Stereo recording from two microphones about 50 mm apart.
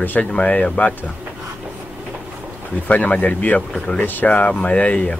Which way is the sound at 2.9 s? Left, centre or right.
Left.